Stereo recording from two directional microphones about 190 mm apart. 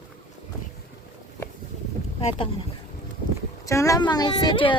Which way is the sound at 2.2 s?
35° left (ahead or behind).